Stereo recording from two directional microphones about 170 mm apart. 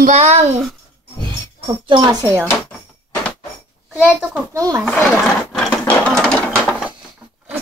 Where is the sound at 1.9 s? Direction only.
25° right (ahead or behind).